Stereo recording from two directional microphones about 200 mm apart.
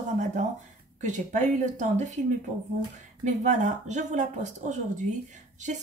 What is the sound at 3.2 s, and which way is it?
A woman's voice, 35° right (ahead or behind).